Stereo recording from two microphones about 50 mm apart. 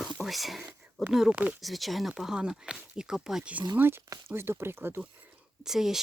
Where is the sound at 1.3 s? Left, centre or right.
Right.